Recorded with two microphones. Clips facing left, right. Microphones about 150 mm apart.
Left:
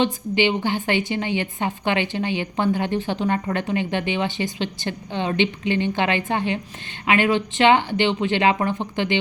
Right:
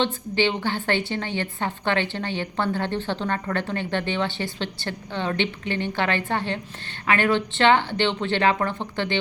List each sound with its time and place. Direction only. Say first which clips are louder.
0.0 s a woman's voice: left 3 dB; 15° left (ahead or behind)